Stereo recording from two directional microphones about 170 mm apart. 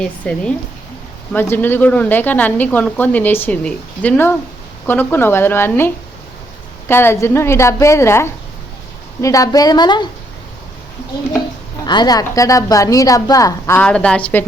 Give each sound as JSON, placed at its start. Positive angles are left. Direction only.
{"t": 0.0, "sound": "a woman's voice", "side_deg": 5}
{"t": 11.9, "sound": "a woman's voice", "side_deg": 25}